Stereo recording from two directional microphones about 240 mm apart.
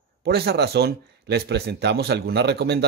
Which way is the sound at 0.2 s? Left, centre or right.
Right.